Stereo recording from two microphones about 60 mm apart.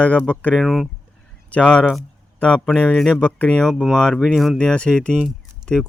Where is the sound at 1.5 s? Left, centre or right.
Centre.